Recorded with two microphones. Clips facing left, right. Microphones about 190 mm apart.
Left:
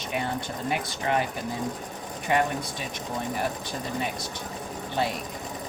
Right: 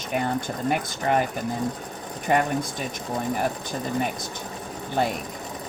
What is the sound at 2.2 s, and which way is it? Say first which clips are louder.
Speech: right 3 dB; 45° right (ahead or behind).